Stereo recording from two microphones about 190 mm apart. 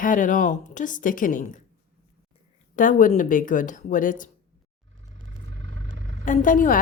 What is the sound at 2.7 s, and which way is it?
A woman's voice, 45° left (ahead or behind).